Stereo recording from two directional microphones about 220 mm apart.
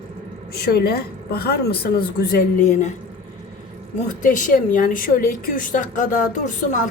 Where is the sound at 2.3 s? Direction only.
35° left (ahead or behind).